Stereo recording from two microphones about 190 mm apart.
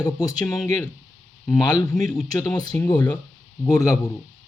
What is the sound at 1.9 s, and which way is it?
Speech, 5° left (ahead or behind).